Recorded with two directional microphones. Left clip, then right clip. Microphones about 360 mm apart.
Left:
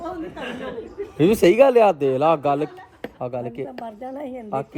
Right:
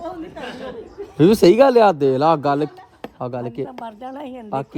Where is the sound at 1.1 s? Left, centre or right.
Centre.